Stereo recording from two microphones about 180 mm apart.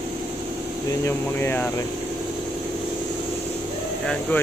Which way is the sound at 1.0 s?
10° left (ahead or behind).